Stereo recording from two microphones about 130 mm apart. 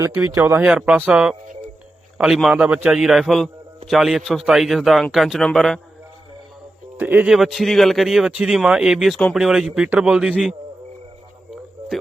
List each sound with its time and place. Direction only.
0.3 s speech: 20° right (ahead or behind)
0.6 s a man's voice: 5° right (ahead or behind)
7.0 s speech: 15° right (ahead or behind)
7.3 s a man's voice: centre (ahead or behind)